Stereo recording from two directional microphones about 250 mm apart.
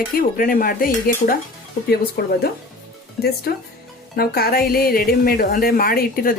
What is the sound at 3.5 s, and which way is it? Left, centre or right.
Speech, left.